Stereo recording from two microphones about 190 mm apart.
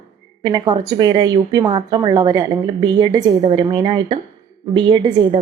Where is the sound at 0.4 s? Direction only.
20° right (ahead or behind).